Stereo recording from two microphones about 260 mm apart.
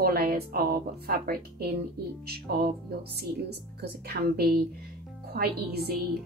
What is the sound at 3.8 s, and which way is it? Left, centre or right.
A woman's voice, right.